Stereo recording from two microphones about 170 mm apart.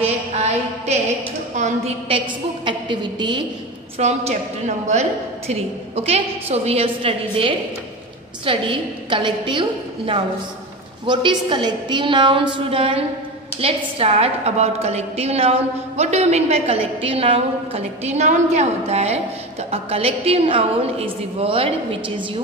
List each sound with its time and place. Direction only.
0.0 s a sound: 40° right (ahead or behind)
1.6 s a woman's voice: 35° right (ahead or behind)
4.0 s a woman's voice: 45° right (ahead or behind)